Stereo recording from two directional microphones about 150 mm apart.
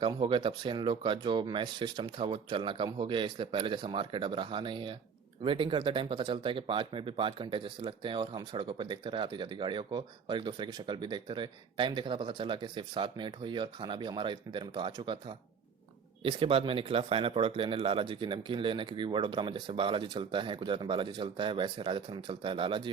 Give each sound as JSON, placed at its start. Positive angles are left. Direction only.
{"t": 0.0, "sound": "speech", "side_deg": -35}